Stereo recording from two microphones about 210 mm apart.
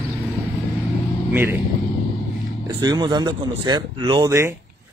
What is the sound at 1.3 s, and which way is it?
Speech, 10° right (ahead or behind).